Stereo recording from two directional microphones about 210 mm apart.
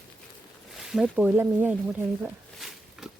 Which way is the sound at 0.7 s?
Centre (ahead or behind).